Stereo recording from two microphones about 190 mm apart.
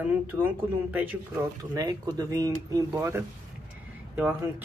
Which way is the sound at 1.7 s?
20° right (ahead or behind).